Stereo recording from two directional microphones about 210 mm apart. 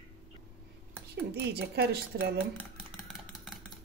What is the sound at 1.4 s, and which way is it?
Speech, 50° right (ahead or behind).